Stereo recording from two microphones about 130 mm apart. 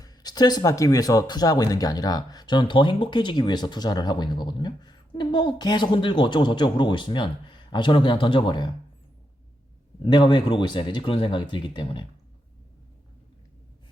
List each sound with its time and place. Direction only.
0.0 s speech: 30° left (ahead or behind)
10.0 s speech: 35° left (ahead or behind)